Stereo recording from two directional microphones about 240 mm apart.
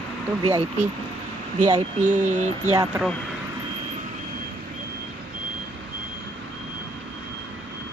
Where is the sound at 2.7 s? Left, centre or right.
Centre.